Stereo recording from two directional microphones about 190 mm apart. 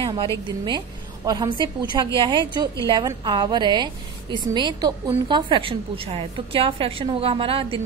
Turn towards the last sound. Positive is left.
turn(degrees=-30)  # may be behind; listen again after turning